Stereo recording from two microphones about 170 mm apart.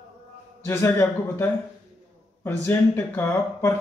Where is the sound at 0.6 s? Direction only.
15° left (ahead or behind).